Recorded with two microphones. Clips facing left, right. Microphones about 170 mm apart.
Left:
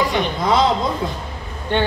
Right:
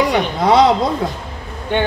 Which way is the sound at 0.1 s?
70° right (ahead or behind).